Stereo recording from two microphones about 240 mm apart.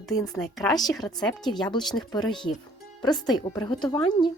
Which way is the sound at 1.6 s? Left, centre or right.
Centre.